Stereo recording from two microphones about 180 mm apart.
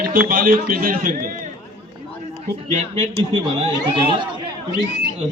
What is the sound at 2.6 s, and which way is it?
Speech, 40° right (ahead or behind).